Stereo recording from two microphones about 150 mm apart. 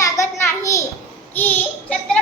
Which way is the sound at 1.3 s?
10° left (ahead or behind).